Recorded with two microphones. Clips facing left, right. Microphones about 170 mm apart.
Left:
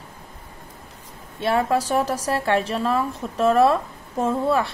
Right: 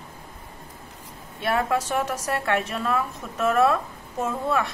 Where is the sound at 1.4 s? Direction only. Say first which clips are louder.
Left 3 dB; 25° left (ahead or behind).